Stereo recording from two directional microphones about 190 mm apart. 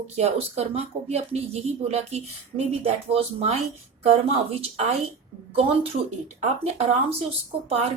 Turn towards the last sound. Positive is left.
turn(degrees=-30)  # may be behind; listen again after turning